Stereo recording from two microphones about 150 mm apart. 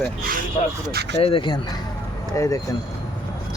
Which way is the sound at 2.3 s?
20° left (ahead or behind).